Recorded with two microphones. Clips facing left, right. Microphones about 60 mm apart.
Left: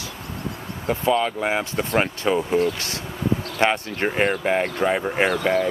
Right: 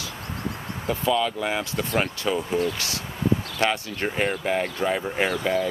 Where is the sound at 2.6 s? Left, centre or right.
Left.